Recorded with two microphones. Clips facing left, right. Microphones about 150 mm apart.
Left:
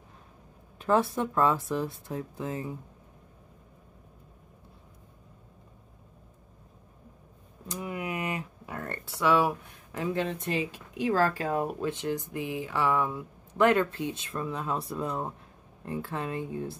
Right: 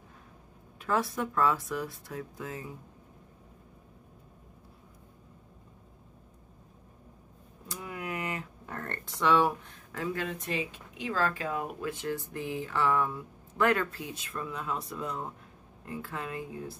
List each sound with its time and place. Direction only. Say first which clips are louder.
0.7 s speech: left 5 dB; 30° left (ahead or behind)
7.6 s a sound: left 4 dB; 20° left (ahead or behind)
9.7 s speech: left 3 dB; 15° left (ahead or behind); by 11.9 s 35° left (ahead or behind)
11.9 s speech: left 3 dB; 20° left (ahead or behind)